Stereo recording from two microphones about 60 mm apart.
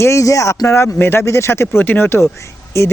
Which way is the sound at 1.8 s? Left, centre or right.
Left.